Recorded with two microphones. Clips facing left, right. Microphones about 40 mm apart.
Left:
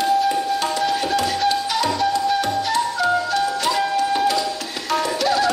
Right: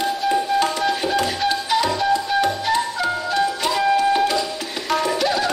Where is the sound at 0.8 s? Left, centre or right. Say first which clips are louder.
Even; centre.